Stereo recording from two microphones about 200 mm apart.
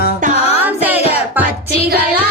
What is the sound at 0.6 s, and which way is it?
Music, 10° right (ahead or behind).